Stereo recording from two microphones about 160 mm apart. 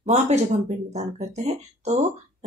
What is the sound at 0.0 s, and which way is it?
Speech, 45° right (ahead or behind).